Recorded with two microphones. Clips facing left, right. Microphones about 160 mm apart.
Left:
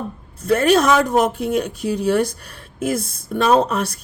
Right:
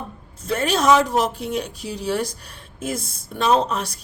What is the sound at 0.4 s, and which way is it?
A woman's voice, 60° left (ahead or behind).